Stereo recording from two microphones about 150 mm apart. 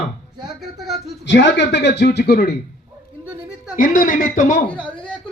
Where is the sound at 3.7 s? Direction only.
65° left (ahead or behind).